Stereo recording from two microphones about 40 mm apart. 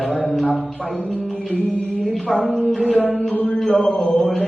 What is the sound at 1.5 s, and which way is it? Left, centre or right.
Music, centre.